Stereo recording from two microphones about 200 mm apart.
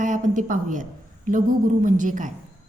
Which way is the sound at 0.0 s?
40° right (ahead or behind).